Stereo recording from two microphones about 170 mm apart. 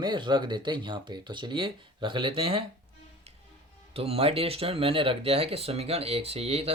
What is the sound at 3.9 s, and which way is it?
Speech, 35° right (ahead or behind).